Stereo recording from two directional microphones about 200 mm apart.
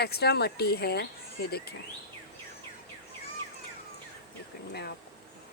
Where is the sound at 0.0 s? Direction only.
55° left (ahead or behind).